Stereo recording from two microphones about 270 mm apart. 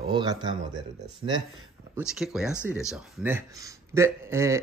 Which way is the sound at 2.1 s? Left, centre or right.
Centre.